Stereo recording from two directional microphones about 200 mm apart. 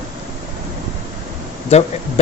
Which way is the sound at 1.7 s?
30° left (ahead or behind).